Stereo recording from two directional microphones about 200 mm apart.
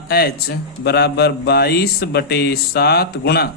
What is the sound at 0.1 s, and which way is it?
Speech, 50° left (ahead or behind).